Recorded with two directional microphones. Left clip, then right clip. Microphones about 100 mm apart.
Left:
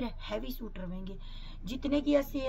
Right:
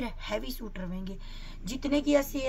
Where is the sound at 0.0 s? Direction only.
10° right (ahead or behind).